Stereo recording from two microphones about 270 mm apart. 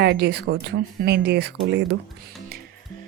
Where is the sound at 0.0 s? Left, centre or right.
Right.